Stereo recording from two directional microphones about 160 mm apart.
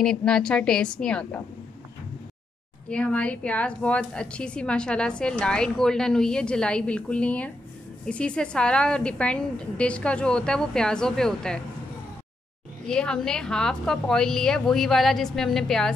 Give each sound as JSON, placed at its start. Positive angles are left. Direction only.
{"t": 0.0, "sound": "a woman's voice", "side_deg": 5}
{"t": 2.9, "sound": "a woman's voice", "side_deg": 5}
{"t": 12.8, "sound": "a woman's voice", "side_deg": 5}